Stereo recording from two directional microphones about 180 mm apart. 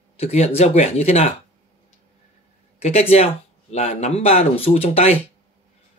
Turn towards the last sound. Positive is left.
turn(degrees=35)  # may be behind; listen again after turning